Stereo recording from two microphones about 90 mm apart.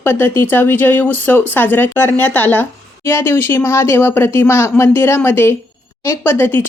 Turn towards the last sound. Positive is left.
turn(degrees=20)  # may be behind; listen again after turning